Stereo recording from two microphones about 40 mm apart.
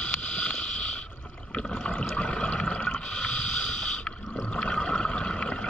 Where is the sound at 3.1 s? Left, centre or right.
Left.